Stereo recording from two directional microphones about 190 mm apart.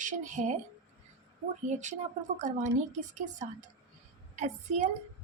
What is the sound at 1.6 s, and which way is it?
Speech, 40° right (ahead or behind).